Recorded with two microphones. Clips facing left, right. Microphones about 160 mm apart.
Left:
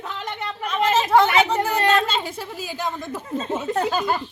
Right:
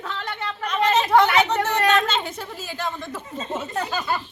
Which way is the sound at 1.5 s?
10° left (ahead or behind).